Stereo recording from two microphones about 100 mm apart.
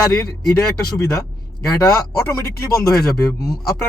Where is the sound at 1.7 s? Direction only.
30° left (ahead or behind).